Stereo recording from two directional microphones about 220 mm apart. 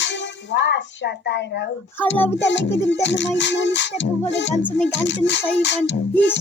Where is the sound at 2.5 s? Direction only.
55° left (ahead or behind).